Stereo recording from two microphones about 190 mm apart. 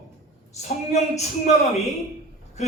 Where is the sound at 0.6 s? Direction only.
35° left (ahead or behind).